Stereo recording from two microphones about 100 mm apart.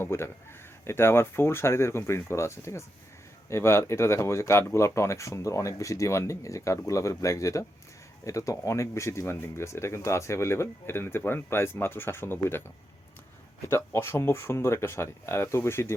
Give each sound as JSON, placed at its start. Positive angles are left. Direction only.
{"t": 0.0, "sound": "speech", "side_deg": 25}